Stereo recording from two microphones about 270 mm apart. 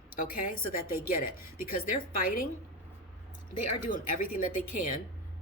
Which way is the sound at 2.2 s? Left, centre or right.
Left.